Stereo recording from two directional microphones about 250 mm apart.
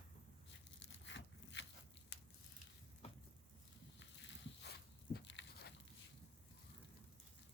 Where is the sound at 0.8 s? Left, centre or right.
Left.